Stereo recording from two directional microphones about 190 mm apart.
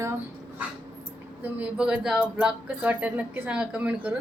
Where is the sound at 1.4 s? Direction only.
10° right (ahead or behind).